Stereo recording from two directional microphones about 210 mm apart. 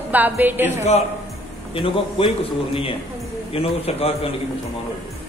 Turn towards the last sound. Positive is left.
turn(degrees=30)  # may be behind; listen again after turning